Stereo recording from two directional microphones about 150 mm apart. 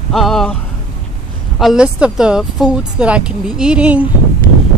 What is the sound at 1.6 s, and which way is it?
Speech, 5° right (ahead or behind).